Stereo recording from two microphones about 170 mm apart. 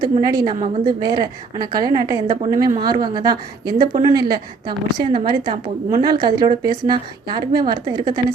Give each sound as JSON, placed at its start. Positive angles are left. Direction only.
{"t": 0.0, "sound": "a woman's voice", "side_deg": -25}